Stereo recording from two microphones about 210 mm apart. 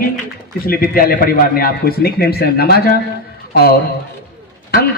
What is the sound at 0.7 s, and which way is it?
A man's voice, 45° left (ahead or behind).